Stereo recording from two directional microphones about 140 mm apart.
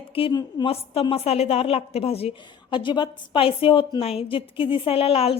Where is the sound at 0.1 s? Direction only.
40° left (ahead or behind).